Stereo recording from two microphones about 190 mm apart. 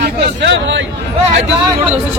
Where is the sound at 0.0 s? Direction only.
70° right (ahead or behind).